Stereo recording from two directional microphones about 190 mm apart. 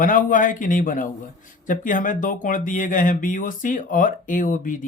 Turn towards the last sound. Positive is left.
turn(degrees=45)  # may be behind; listen again after turning